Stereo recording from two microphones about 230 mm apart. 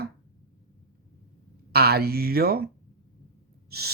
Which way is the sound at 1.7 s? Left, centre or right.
Right.